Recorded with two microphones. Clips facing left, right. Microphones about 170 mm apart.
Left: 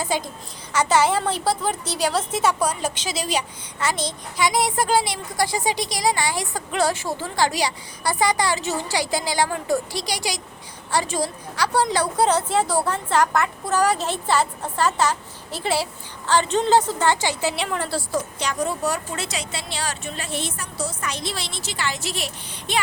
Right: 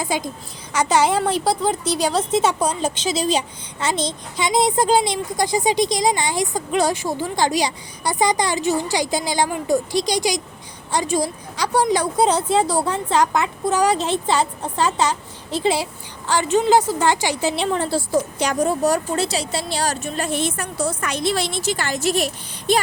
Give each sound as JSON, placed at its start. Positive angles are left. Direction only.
{"t": 0.0, "sound": "a woman's voice", "side_deg": -15}
{"t": 17.6, "sound": "a woman's voice", "side_deg": -25}
{"t": 18.4, "sound": "a woman's voice", "side_deg": -40}